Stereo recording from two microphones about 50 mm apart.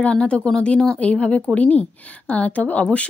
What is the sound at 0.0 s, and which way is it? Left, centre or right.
Speech, left.